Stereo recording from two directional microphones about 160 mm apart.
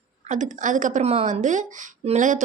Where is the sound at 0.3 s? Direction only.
50° right (ahead or behind).